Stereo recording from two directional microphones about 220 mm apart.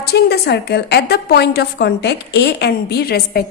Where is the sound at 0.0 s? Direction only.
45° left (ahead or behind).